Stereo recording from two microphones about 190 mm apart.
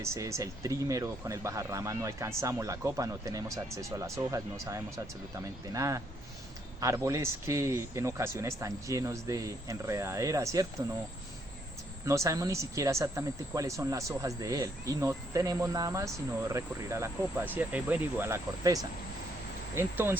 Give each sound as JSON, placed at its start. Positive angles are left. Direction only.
{"t": 0.0, "sound": "speech", "side_deg": -15}
{"t": 12.0, "sound": "speech", "side_deg": -15}